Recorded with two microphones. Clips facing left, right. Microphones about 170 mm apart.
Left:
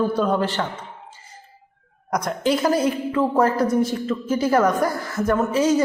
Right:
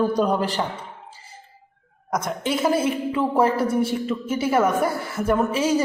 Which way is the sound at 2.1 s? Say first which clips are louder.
Left 3 dB; centre (ahead or behind).